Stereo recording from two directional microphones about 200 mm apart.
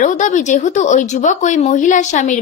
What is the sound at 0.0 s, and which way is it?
Speech, 40° left (ahead or behind).